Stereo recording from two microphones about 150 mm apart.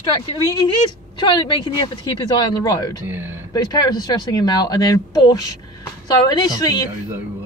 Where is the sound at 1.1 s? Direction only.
30° left (ahead or behind).